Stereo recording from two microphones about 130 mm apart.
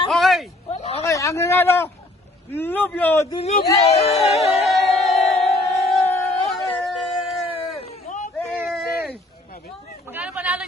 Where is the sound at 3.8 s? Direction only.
55° left (ahead or behind).